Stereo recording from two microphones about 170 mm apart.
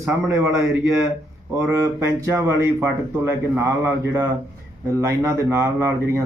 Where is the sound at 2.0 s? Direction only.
15° right (ahead or behind).